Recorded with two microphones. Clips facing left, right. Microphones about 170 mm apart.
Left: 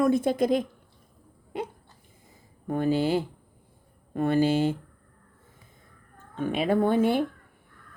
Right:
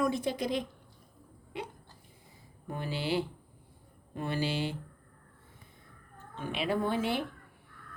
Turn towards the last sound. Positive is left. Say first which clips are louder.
# left 8 dB
turn(degrees=50)  # may be behind; listen again after turning